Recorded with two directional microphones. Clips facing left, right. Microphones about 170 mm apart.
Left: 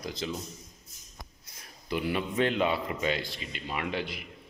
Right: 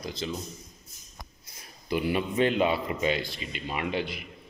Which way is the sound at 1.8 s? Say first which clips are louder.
Right 3 dB; 5° right (ahead or behind).